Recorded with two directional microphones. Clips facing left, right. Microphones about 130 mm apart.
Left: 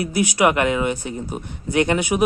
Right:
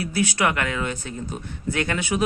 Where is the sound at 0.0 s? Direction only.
15° left (ahead or behind).